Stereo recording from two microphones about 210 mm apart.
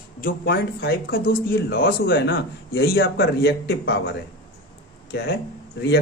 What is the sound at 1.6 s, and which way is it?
Speech, 60° left (ahead or behind).